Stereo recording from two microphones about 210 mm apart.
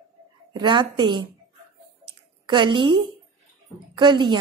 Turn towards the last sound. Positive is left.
turn(degrees=-20)  # may be behind; listen again after turning